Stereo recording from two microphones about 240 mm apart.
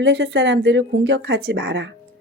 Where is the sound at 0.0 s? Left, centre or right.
Right.